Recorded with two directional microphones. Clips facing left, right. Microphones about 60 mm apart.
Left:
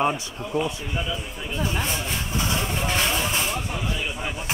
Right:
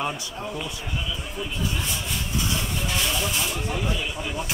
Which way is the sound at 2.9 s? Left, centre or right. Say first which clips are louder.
Left 2 dB; left.